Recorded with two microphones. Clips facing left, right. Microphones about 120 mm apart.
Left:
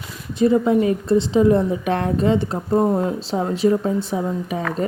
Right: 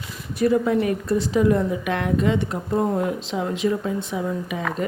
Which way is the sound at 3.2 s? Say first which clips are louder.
Left 4 dB; 35° left (ahead or behind).